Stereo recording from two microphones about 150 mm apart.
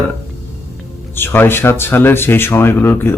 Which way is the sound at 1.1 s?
15° left (ahead or behind).